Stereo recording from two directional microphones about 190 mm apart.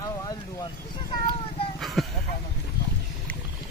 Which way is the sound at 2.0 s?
Centre (ahead or behind).